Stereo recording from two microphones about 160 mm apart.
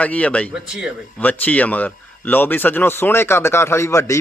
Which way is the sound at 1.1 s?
10° left (ahead or behind).